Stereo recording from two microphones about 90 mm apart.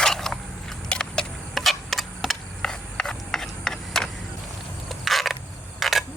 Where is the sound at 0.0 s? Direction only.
5° left (ahead or behind).